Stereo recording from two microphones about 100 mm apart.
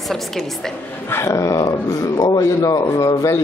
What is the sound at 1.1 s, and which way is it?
A man's voice, 30° left (ahead or behind).